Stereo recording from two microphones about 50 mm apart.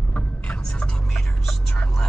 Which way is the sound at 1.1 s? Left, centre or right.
Centre.